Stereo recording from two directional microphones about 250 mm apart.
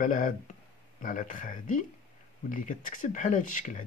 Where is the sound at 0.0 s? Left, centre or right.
Left.